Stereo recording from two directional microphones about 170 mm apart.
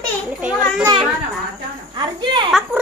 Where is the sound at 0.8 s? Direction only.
25° right (ahead or behind).